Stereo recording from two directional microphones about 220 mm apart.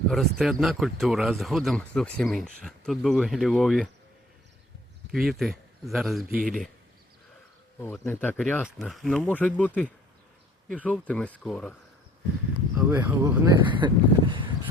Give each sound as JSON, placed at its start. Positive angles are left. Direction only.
{"t": 0.1, "sound": "speech", "side_deg": 0}
{"t": 5.1, "sound": "speech", "side_deg": 0}
{"t": 6.3, "sound": "speech", "side_deg": -40}
{"t": 7.8, "sound": "speech", "side_deg": 10}
{"t": 12.7, "sound": "speech", "side_deg": -10}
{"t": 13.7, "sound": "a sound", "side_deg": -20}